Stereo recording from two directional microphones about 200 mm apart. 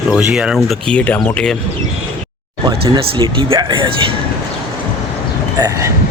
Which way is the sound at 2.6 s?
25° right (ahead or behind).